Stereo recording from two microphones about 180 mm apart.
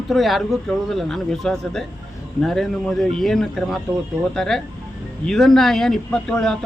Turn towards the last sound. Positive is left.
turn(degrees=5)  # may be behind; listen again after turning